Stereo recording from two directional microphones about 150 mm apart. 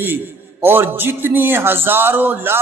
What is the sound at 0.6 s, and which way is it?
A man's voice, 15° right (ahead or behind).